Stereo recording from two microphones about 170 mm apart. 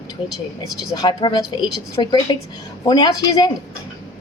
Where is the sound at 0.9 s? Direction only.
25° left (ahead or behind).